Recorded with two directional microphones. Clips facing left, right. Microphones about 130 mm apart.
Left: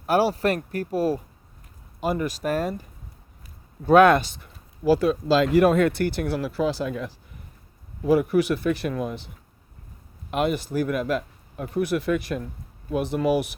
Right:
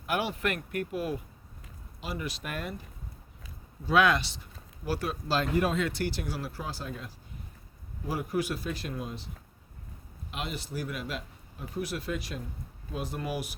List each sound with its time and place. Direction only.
0.0 s speech: 35° left (ahead or behind)
2.0 s speech: 50° left (ahead or behind)
3.8 s speech: 50° left (ahead or behind)
5.4 s speech: 70° left (ahead or behind)
8.0 s speech: 65° left (ahead or behind)
10.3 s speech: 55° left (ahead or behind)
12.9 s speech: 70° left (ahead or behind)